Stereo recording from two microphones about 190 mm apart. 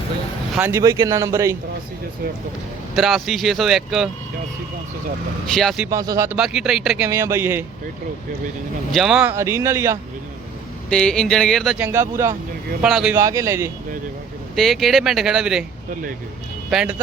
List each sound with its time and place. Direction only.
0.5 s speech: 10° right (ahead or behind)
2.9 s a man's voice: centre (ahead or behind)
5.5 s a man's voice: centre (ahead or behind)
5.9 s speech: 15° right (ahead or behind)
6.3 s a man's voice: 5° right (ahead or behind)
8.9 s speech: centre (ahead or behind)
10.8 s a man's voice: 5° left (ahead or behind)
11.9 s speech: 15° right (ahead or behind)
12.8 s a man's voice: 5° right (ahead or behind)
13.1 s speech: 15° right (ahead or behind)
14.5 s a man's voice: centre (ahead or behind)
16.6 s speech: 5° right (ahead or behind)